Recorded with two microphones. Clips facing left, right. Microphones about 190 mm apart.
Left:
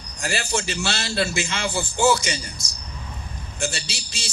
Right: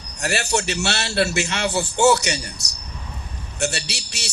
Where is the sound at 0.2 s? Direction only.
65° right (ahead or behind).